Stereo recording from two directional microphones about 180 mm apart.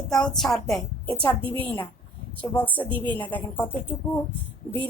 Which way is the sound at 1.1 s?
10° left (ahead or behind).